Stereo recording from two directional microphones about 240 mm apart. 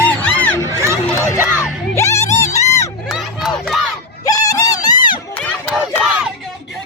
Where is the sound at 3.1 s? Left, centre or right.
Centre.